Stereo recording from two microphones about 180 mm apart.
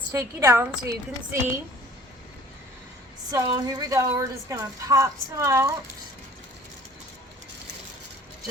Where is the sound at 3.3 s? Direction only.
20° right (ahead or behind).